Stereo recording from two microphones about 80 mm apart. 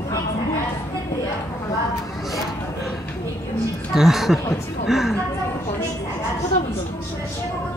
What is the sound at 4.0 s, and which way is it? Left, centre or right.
Speech, centre.